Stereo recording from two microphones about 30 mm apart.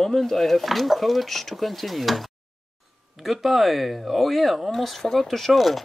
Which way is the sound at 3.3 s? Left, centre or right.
Centre.